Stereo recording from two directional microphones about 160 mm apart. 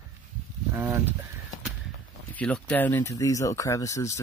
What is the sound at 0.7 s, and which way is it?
Speech, 15° right (ahead or behind).